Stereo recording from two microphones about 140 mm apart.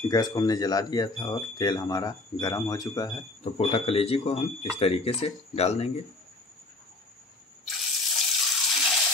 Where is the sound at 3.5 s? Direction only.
45° left (ahead or behind).